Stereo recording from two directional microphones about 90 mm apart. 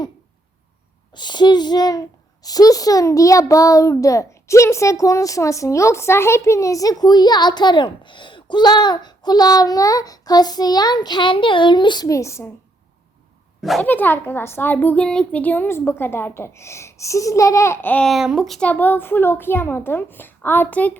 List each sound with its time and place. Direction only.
1.1 s a child's voice: 55° left (ahead or behind)
12.0 s a child's voice: 35° left (ahead or behind)
13.6 s a child's voice: centre (ahead or behind)
13.8 s a woman's voice: 20° left (ahead or behind)
15.0 s a woman's voice: 10° left (ahead or behind); by 17.7 s 35° left (ahead or behind)
17.7 s a woman's voice: 20° left (ahead or behind)
18.0 s speech: centre (ahead or behind)
18.7 s a woman's voice: 20° left (ahead or behind)